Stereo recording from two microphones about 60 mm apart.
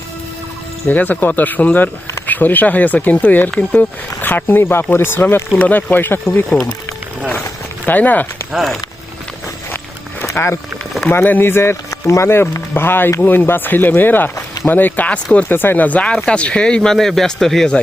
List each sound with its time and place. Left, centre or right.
0.9 s speech: left
7.9 s speech: left
8.5 s speech: centre
10.4 s speech: left
11.9 s speech: left
12.7 s speech: left
15.4 s speech: left; by 17.7 s centre